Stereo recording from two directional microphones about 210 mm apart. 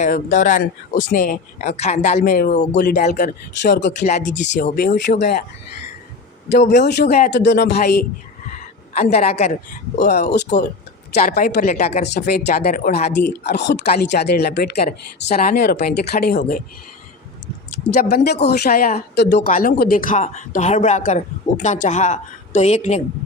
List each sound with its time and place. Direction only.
0.0 s speech: 35° left (ahead or behind); by 5.4 s 55° left (ahead or behind)
6.7 s speech: 55° left (ahead or behind)
8.4 s a sound: 35° left (ahead or behind)
9.1 s speech: 30° left (ahead or behind)
11.1 s speech: 40° left (ahead or behind)
17.9 s speech: 50° left (ahead or behind); by 23.0 s 30° left (ahead or behind)